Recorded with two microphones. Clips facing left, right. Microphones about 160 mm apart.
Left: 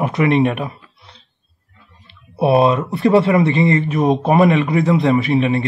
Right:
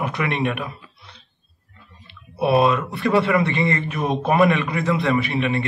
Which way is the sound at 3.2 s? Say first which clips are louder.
Left 5 dB; 40° left (ahead or behind).